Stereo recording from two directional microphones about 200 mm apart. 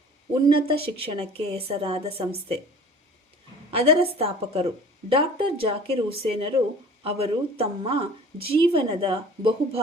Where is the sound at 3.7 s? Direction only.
30° right (ahead or behind).